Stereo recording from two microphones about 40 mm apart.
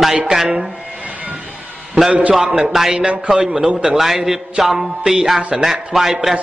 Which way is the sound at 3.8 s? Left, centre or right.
Centre.